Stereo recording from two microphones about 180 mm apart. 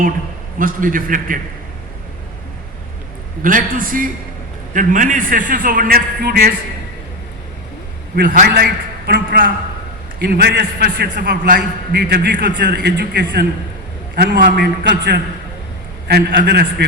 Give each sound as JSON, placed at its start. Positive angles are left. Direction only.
{"t": 0.6, "sound": "a man's voice", "side_deg": -50}
{"t": 3.4, "sound": "a man's voice", "side_deg": -50}
{"t": 8.1, "sound": "a man's voice", "side_deg": -55}